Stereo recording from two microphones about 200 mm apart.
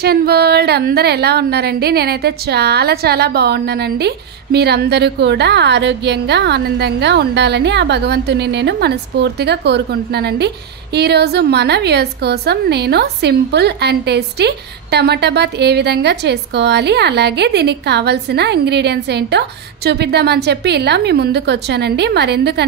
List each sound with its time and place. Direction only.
0.0 s a woman's voice: 50° right (ahead or behind)